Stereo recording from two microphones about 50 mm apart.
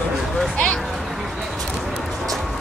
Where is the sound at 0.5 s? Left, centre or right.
Left.